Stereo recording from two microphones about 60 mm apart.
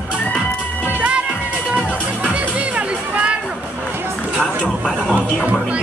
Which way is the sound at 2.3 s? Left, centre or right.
Right.